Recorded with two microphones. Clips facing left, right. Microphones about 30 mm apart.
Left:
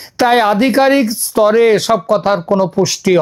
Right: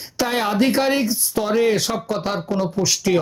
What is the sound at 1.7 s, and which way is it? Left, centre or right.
Speech, left.